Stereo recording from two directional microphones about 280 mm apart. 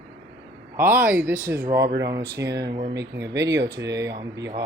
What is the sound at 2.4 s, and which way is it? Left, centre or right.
Speech, right.